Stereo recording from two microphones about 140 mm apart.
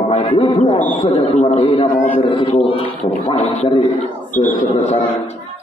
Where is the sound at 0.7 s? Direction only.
60° left (ahead or behind).